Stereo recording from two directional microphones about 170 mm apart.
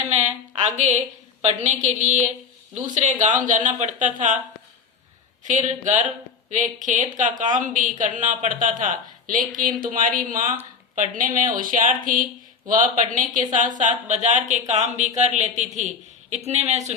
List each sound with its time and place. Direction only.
0.1 s a woman's voice: 45° right (ahead or behind)
5.4 s speech: 45° right (ahead or behind)